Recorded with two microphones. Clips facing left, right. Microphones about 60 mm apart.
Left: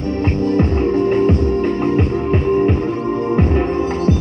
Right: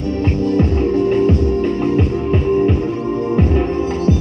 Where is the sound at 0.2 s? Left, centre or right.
Left.